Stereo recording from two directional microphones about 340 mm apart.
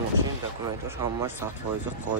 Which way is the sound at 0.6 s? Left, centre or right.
Centre.